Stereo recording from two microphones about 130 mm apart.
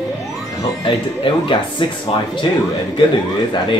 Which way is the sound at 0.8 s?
40° left (ahead or behind).